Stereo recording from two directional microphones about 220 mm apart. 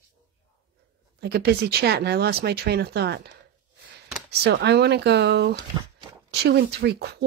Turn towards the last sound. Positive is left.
turn(degrees=-50)  # may be behind; listen again after turning